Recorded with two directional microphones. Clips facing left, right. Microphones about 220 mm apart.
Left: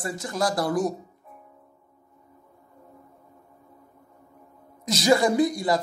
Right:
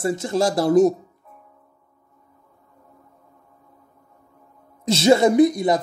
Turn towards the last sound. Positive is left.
turn(degrees=-20)  # may be behind; listen again after turning